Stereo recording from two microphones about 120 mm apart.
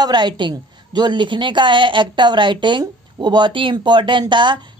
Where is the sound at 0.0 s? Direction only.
40° right (ahead or behind).